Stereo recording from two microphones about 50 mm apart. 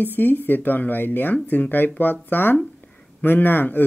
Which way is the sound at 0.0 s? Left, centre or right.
Left.